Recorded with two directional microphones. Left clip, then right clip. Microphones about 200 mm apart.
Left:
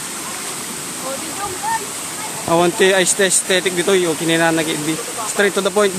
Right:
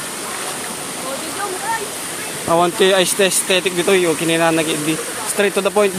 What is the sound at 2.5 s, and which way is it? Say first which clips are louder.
Speech: even; 5° left (ahead or behind).